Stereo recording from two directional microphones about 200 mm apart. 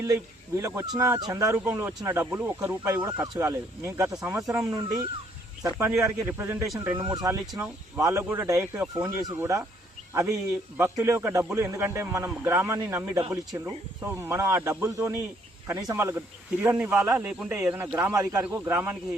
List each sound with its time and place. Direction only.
0.0 s speech: 15° right (ahead or behind)
10.8 s speech: 15° right (ahead or behind)